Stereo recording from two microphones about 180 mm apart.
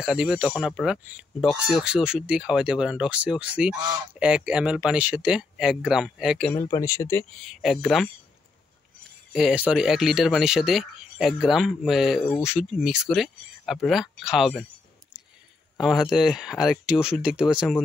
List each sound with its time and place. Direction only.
0.0 s speech: 5° right (ahead or behind)
3.7 s speech: 20° right (ahead or behind)
4.2 s speech: 5° right (ahead or behind)
6.7 s speech: 15° left (ahead or behind)
7.3 s speech: centre (ahead or behind)
9.3 s speech: 5° right (ahead or behind)
15.8 s speech: centre (ahead or behind)